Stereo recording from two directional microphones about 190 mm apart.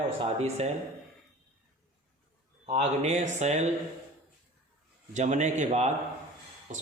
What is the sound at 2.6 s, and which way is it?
A man's voice, 35° right (ahead or behind).